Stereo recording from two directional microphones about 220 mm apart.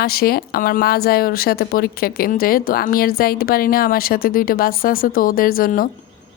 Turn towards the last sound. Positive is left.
turn(degrees=40)  # may be behind; listen again after turning